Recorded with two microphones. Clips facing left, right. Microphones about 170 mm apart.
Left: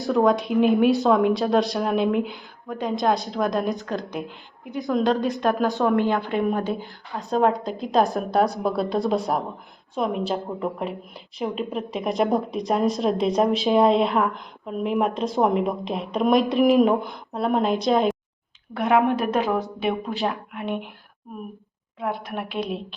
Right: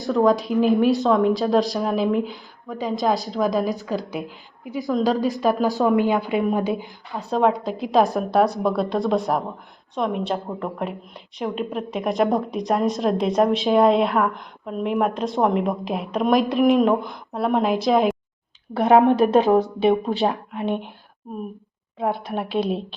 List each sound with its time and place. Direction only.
0.0 s speech: centre (ahead or behind)
7.1 s speech: centre (ahead or behind)
18.7 s a woman's voice: 35° right (ahead or behind)
22.3 s a woman's voice: 30° right (ahead or behind)